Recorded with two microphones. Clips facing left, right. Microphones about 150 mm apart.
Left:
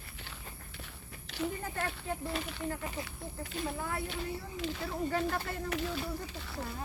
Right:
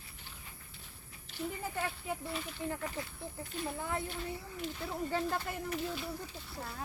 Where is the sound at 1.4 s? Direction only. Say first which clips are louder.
Left 4 dB; 80° left.